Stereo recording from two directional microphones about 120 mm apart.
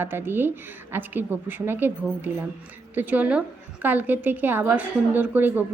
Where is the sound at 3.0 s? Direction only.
15° right (ahead or behind).